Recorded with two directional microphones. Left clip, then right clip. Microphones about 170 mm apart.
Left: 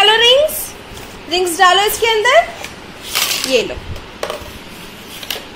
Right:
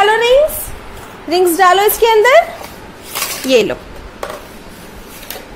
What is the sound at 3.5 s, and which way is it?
Speech, 60° right (ahead or behind).